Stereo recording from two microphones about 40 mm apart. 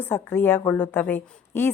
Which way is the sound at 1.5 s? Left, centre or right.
Left.